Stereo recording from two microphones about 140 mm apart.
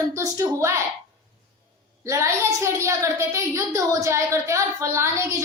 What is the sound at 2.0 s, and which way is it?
A woman's voice, 20° right (ahead or behind).